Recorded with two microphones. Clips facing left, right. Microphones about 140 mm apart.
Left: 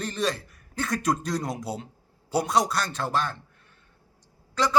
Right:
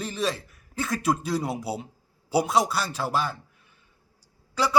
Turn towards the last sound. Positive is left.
turn(degrees=-10)  # may be behind; listen again after turning